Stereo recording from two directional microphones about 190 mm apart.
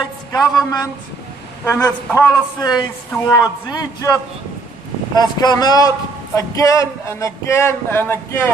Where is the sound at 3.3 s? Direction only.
15° left (ahead or behind).